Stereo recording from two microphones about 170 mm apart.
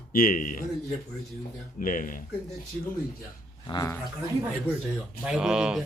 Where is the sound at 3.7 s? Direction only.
20° left (ahead or behind).